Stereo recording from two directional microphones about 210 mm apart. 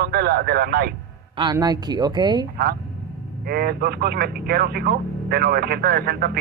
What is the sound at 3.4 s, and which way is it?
Speech, 45° right (ahead or behind).